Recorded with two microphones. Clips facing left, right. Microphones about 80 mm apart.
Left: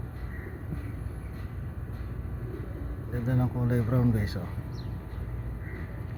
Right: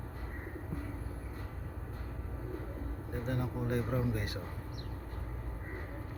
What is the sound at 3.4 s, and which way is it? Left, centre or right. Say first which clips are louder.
Speech: left 6 dB; left.